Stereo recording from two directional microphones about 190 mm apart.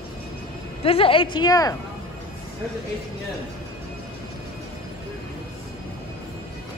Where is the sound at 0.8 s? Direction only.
30° left (ahead or behind).